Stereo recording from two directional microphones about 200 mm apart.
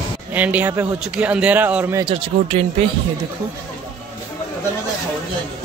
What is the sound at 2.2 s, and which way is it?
Speech, 30° right (ahead or behind).